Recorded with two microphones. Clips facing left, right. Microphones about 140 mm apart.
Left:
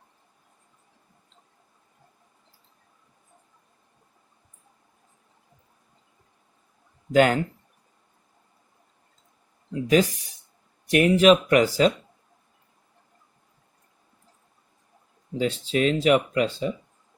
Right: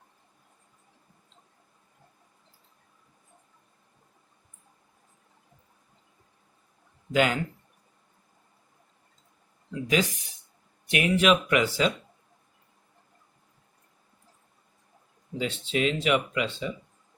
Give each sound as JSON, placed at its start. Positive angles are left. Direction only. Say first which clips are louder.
{"t": 7.1, "sound": "speech", "louder": "left 6 dB", "side_deg": 45}
{"t": 9.9, "sound": "speech", "louder": "left 6 dB", "side_deg": 40}
{"t": 15.4, "sound": "speech", "louder": "left 4 dB", "side_deg": 40}